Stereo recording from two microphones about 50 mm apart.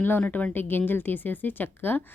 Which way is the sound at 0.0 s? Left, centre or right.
Left.